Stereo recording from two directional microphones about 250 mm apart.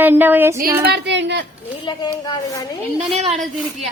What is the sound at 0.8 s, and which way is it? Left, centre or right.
Speech, right.